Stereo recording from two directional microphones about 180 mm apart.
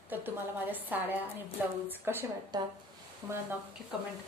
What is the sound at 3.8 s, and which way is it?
Speech, 5° right (ahead or behind).